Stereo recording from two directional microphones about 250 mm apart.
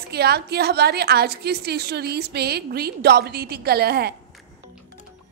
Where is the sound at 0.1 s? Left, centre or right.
Right.